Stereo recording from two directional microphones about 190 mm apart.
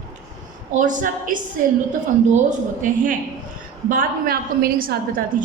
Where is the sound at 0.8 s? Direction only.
45° right (ahead or behind).